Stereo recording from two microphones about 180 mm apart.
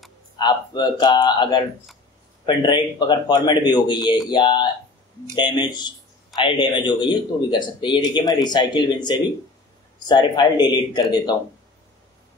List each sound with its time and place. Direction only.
0.4 s speech: 25° left (ahead or behind)